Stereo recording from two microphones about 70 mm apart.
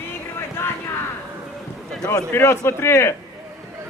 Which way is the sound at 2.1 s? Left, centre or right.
Left.